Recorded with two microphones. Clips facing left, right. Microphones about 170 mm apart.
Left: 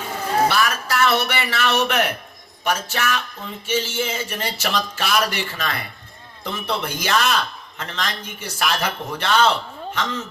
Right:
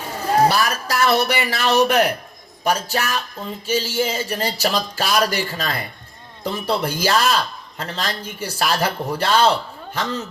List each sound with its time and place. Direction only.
0.4 s a man's voice: 35° right (ahead or behind)